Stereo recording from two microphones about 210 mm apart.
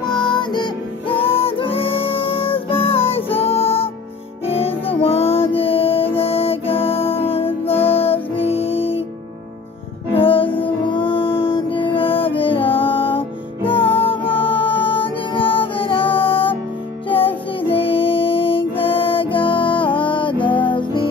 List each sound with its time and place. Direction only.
0.3 s music: 20° left (ahead or behind)
10.1 s music: 25° left (ahead or behind)
17.6 s music: 25° left (ahead or behind)